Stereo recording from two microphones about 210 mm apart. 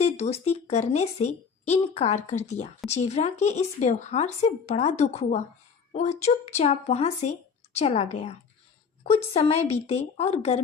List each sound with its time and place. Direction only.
0.0 s a woman's voice: 30° left (ahead or behind)